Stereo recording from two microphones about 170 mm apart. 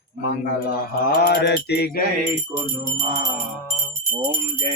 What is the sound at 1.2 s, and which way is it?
Music, 75° left (ahead or behind).